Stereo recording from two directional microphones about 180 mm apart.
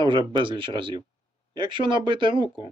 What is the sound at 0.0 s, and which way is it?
Speech, 25° right (ahead or behind).